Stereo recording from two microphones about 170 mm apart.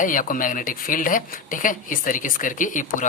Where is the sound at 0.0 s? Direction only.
50° left (ahead or behind).